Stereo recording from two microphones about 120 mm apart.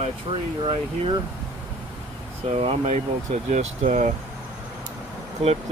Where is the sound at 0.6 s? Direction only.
45° right (ahead or behind).